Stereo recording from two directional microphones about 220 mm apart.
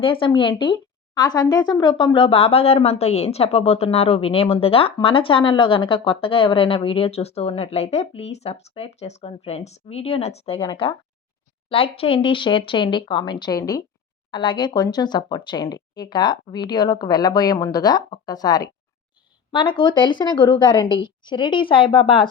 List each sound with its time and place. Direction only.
0.0 s speech: 25° left (ahead or behind)